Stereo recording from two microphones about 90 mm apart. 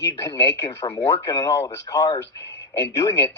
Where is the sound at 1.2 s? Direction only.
35° left (ahead or behind).